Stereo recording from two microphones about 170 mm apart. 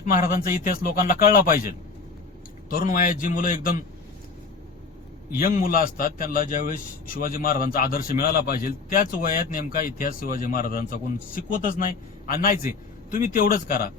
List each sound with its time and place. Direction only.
0.0 s a man's voice: 55° left (ahead or behind)
5.3 s a man's voice: 55° left (ahead or behind)